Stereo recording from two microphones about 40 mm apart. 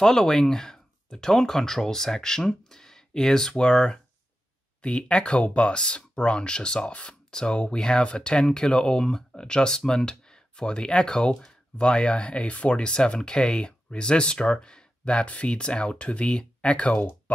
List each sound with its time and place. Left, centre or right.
0.0 s speech: centre
3.5 s speech: left